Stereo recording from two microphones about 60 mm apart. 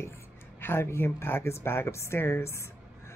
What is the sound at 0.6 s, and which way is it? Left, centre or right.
Speech, left.